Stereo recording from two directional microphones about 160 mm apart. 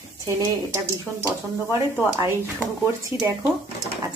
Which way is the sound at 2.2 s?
15° right (ahead or behind).